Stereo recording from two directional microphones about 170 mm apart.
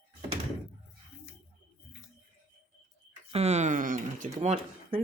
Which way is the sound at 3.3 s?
40° right (ahead or behind).